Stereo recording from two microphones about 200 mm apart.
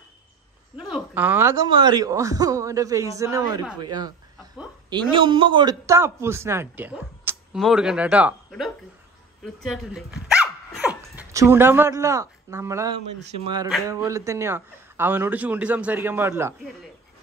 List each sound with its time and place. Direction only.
0.9 s a man's voice: 10° right (ahead or behind)
3.8 s a sound: 20° right (ahead or behind)
4.8 s a man's voice: 25° right (ahead or behind)